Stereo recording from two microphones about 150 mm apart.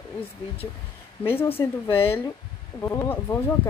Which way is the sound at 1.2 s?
15° left (ahead or behind).